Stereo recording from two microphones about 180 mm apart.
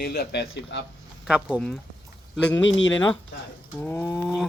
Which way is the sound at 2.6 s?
90° left.